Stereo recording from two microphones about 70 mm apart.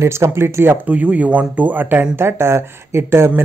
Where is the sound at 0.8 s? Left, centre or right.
Right.